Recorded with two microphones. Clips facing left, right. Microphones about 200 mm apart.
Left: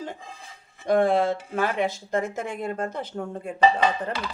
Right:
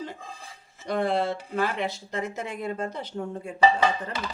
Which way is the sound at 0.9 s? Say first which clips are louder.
Left 5 dB; 45° left (ahead or behind).